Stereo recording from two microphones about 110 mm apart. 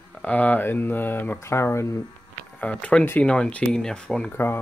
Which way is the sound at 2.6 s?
10° left (ahead or behind).